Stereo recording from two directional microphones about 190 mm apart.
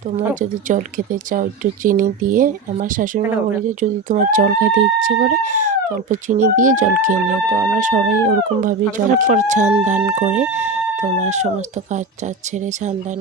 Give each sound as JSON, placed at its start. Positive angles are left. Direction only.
{"t": 0.3, "sound": "speech", "side_deg": -45}